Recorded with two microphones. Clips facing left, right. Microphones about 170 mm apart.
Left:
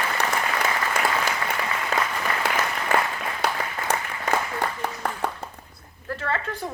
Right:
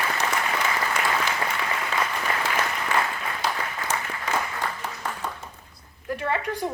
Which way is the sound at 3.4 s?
60° left (ahead or behind).